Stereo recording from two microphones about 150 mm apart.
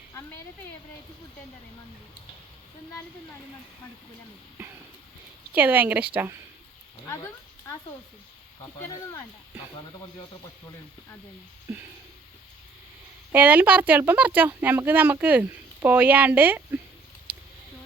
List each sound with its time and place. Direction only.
0.1 s a sound: 15° left (ahead or behind)
5.5 s speech: 10° right (ahead or behind)
7.0 s speech: 15° left (ahead or behind)
8.6 s speech: 15° left (ahead or behind)
13.3 s speech: 10° right (ahead or behind)